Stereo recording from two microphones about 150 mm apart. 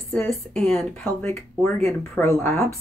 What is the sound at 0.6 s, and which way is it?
Speech, 5° left (ahead or behind).